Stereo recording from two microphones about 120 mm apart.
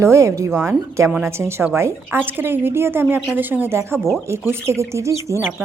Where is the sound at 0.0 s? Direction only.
25° right (ahead or behind).